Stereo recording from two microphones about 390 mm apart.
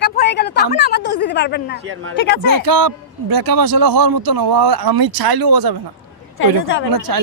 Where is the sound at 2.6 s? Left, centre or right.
Right.